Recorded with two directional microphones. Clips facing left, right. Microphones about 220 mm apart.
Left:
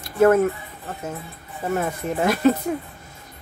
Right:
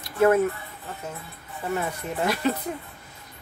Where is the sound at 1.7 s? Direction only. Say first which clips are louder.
Left 5 dB; 50° left (ahead or behind).